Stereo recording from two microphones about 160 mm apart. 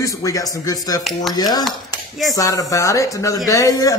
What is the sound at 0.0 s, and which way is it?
Speech, 20° left (ahead or behind).